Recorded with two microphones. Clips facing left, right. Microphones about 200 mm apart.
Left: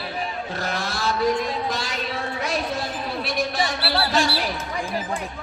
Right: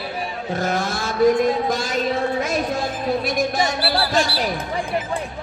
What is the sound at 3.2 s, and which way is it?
Music, 45° right (ahead or behind).